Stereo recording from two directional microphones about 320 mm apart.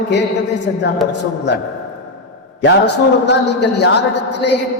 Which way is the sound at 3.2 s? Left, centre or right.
Left.